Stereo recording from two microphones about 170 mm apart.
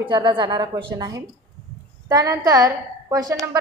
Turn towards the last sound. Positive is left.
turn(degrees=-20)  # may be behind; listen again after turning